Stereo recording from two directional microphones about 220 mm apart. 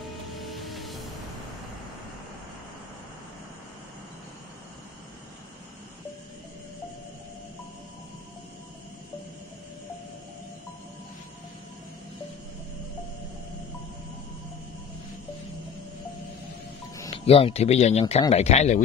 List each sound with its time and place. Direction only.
0.4 s music: centre (ahead or behind)
17.2 s speech: 25° left (ahead or behind)